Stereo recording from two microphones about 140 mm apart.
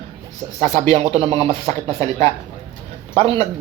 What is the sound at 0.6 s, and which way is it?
Speech, 50° right (ahead or behind).